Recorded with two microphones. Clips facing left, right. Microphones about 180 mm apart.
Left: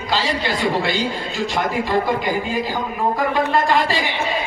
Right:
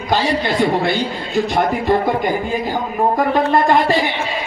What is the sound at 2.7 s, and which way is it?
A man's voice, 45° right (ahead or behind).